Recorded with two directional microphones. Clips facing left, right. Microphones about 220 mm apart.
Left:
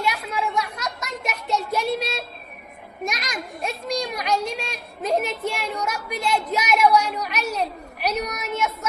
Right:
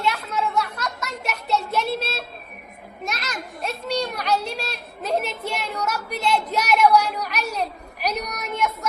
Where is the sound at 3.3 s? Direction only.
10° left (ahead or behind).